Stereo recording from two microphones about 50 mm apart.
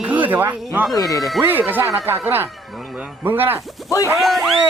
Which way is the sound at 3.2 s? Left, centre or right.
Right.